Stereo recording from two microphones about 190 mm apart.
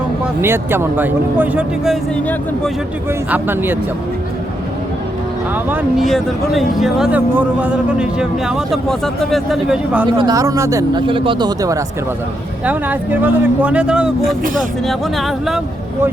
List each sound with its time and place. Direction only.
0.4 s speech: 10° right (ahead or behind); by 2.7 s 5° left (ahead or behind)
3.1 s speech: 10° right (ahead or behind)
5.6 s speech: 10° right (ahead or behind)
10.1 s speech: 20° right (ahead or behind)
12.6 s speech: 10° right (ahead or behind)